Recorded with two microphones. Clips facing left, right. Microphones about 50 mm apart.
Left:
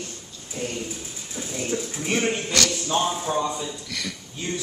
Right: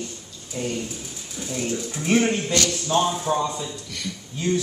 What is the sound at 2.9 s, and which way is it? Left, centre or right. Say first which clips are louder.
Speech: right 3 dB; centre.